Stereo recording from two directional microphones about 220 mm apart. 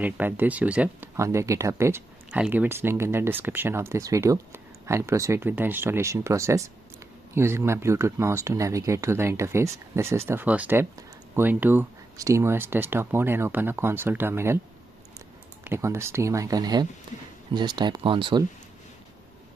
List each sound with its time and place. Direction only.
0.0 s speech: 10° right (ahead or behind)
15.6 s speech: 10° right (ahead or behind)